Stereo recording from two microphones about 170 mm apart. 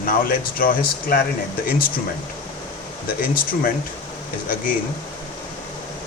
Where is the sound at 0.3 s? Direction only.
55° left (ahead or behind).